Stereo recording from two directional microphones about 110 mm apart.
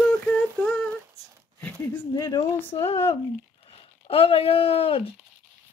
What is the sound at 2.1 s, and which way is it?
Speech, 30° left (ahead or behind).